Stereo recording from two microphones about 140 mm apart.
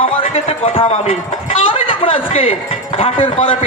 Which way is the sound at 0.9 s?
55° left (ahead or behind).